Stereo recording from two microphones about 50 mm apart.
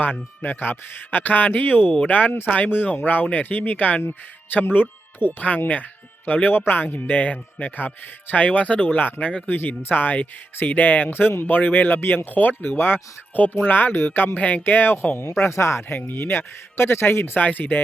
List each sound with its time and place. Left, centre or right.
0.0 s speech: left
8.9 s speech: left
9.6 s speech: left
13.3 s speech: left
14.3 s speech: left
14.6 s speech: left
16.0 s speech: left
17.3 s speech: left